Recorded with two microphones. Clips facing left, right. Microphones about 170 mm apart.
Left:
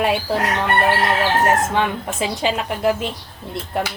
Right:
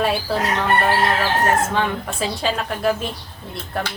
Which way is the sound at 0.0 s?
15° left (ahead or behind).